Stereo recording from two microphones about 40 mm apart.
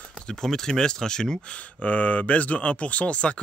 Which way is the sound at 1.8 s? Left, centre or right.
Left.